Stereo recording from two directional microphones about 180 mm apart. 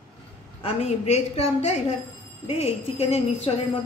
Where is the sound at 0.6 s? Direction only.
35° left (ahead or behind).